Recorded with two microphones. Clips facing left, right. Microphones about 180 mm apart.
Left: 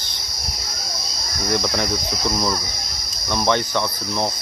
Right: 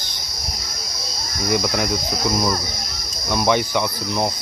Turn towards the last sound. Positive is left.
turn(degrees=-10)  # may be behind; listen again after turning